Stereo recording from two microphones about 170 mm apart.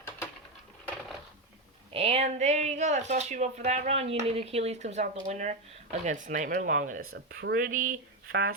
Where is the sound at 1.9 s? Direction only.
35° right (ahead or behind).